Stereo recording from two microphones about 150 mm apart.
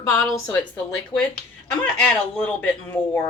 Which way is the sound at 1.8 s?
10° left (ahead or behind).